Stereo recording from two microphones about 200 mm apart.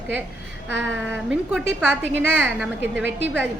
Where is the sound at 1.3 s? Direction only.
5° right (ahead or behind).